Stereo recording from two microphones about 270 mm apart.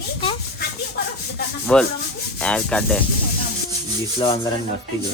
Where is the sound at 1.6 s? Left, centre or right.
Centre.